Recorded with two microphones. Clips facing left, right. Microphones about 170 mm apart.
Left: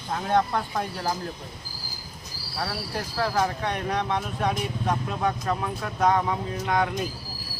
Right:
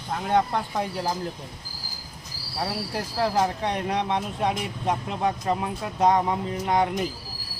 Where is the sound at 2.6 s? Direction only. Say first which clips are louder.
Right 2 dB; 20° right (ahead or behind).